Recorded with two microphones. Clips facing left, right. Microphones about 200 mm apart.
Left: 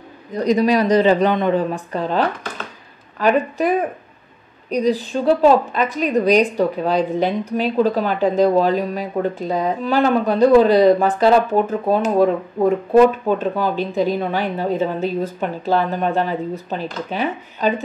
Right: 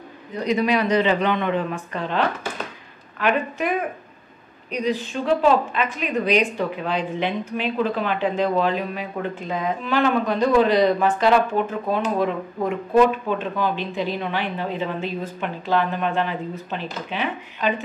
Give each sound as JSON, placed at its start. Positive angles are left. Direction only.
{"t": 0.3, "sound": "a woman's voice", "side_deg": 40}